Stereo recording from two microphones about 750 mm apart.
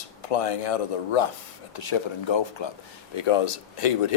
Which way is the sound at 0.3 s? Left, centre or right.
Left.